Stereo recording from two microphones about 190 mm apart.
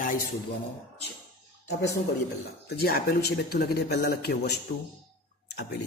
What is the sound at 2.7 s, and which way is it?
A man's voice, 55° left (ahead or behind).